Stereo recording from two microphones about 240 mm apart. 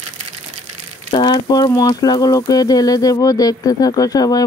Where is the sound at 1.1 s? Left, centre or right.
Centre.